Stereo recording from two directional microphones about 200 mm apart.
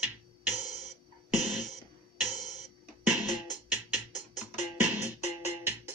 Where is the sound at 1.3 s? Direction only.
Centre (ahead or behind).